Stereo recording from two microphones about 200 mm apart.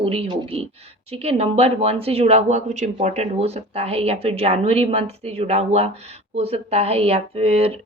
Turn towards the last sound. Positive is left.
turn(degrees=-30)  # may be behind; listen again after turning